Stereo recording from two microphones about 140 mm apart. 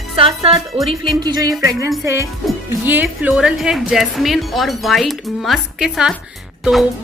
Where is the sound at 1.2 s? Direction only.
30° right (ahead or behind).